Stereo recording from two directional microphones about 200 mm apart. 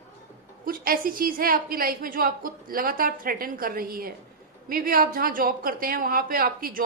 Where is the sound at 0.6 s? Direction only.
45° right (ahead or behind).